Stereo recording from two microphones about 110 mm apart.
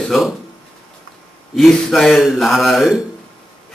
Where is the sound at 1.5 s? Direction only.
Centre (ahead or behind).